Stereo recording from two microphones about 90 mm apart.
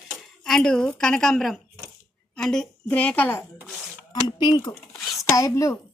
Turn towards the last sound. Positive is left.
turn(degrees=35)  # may be behind; listen again after turning